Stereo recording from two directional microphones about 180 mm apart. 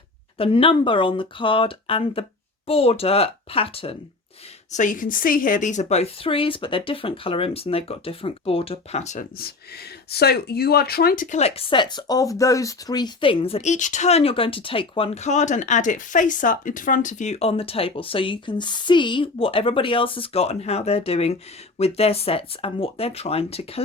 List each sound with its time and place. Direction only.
0.3 s speech: 30° left (ahead or behind)
4.7 s speech: 45° left (ahead or behind)
10.1 s speech: 60° left (ahead or behind); by 23.8 s 35° left (ahead or behind)